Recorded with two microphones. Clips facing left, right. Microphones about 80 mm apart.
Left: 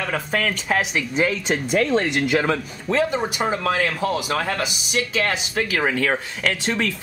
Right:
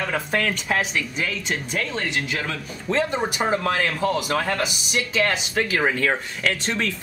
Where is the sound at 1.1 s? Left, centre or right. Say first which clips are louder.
Left 6 dB; left.